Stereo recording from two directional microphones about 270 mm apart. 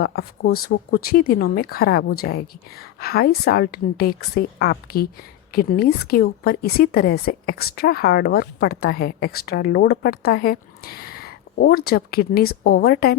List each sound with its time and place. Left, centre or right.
0.0 s a woman's voice: left